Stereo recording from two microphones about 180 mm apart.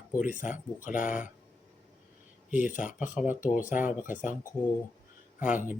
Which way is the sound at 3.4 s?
45° left (ahead or behind).